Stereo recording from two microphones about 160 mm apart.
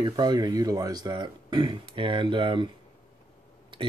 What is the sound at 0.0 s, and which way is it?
Speech, 25° right (ahead or behind).